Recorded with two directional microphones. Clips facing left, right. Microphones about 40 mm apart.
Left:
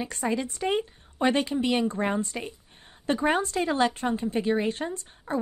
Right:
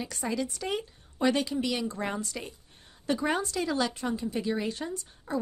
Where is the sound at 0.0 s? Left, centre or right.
Left.